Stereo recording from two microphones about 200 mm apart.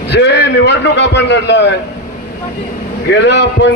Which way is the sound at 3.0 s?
60° left (ahead or behind).